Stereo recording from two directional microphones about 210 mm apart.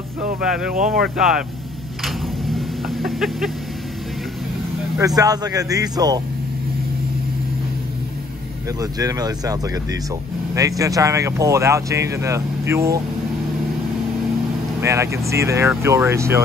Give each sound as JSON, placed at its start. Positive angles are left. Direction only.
{"t": 0.4, "sound": "speech", "side_deg": -5}
{"t": 2.0, "sound": "a sound", "side_deg": 0}
{"t": 4.9, "sound": "speech", "side_deg": -15}
{"t": 8.9, "sound": "speech", "side_deg": -15}
{"t": 14.8, "sound": "speech", "side_deg": -15}